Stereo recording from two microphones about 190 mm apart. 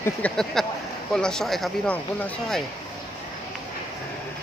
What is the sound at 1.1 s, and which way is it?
Speech, 5° left (ahead or behind).